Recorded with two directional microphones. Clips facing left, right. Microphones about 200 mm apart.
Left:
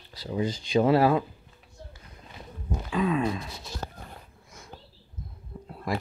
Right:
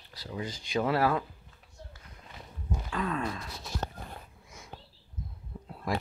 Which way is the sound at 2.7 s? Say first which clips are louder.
Left 6 dB; 15° left (ahead or behind).